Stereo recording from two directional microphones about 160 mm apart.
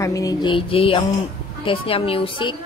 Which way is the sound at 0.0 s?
20° left (ahead or behind).